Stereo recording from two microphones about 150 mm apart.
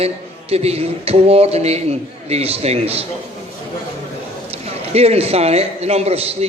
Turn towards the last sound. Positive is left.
turn(degrees=-45)  # may be behind; listen again after turning